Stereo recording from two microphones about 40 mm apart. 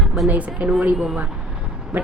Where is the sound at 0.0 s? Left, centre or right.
Centre.